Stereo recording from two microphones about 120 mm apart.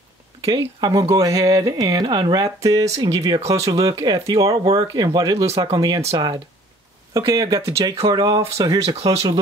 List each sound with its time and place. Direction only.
0.4 s speech: 35° right (ahead or behind)